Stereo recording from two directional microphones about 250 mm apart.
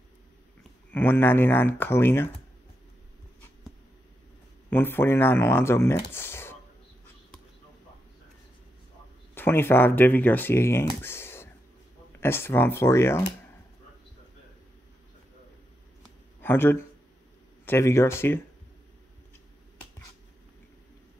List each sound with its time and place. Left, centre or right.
0.9 s speech: centre
4.6 s speech: centre
6.1 s a sound: centre
9.3 s speech: centre
16.3 s speech: centre